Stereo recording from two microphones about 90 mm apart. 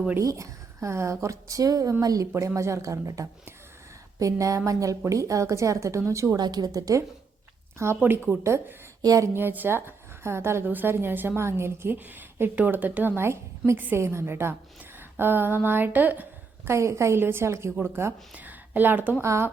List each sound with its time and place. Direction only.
0.2 s a woman's voice: 35° right (ahead or behind)
6.4 s a woman's voice: 50° right (ahead or behind)
8.0 s a woman's voice: 25° right (ahead or behind)
9.0 s a woman's voice: 40° right (ahead or behind); by 16.2 s 20° right (ahead or behind)
16.6 s a woman's voice: 30° right (ahead or behind)
19.2 s a woman's voice: 30° right (ahead or behind)